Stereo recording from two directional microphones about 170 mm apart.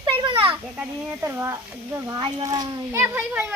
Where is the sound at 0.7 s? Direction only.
10° right (ahead or behind).